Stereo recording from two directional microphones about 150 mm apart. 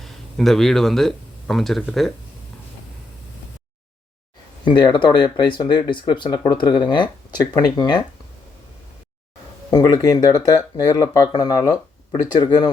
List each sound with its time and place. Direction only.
0.0 s speech: centre (ahead or behind)
4.6 s speech: 30° left (ahead or behind)
9.6 s speech: 25° left (ahead or behind)